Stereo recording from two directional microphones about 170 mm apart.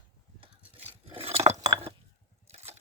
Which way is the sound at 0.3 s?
35° right (ahead or behind).